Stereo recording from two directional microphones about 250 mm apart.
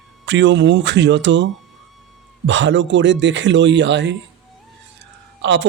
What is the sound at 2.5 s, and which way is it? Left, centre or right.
Speech, right.